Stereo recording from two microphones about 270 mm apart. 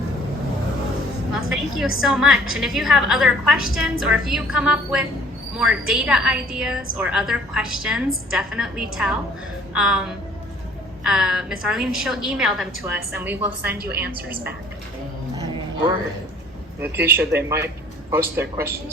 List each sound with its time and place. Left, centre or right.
1.3 s music: centre
2.0 s a woman's voice: centre
13.7 s a woman's voice: right
16.8 s speech: centre